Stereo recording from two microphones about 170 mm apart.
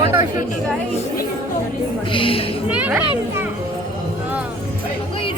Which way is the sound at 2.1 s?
30° left (ahead or behind).